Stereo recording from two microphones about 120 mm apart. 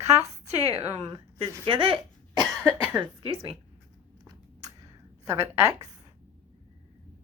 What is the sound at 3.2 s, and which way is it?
Speech, 50° right (ahead or behind).